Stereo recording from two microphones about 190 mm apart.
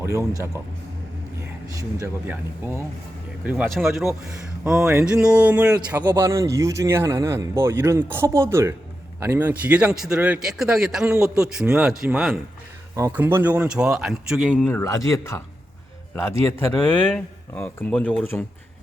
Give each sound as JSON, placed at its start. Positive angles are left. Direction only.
{"t": 0.0, "sound": "speech", "side_deg": -15}
{"t": 1.6, "sound": "speech", "side_deg": -15}
{"t": 14.5, "sound": "speech", "side_deg": 10}
{"t": 16.5, "sound": "speech", "side_deg": 10}